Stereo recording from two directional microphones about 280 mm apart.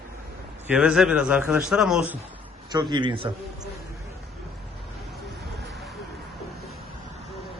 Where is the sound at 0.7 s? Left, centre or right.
Centre.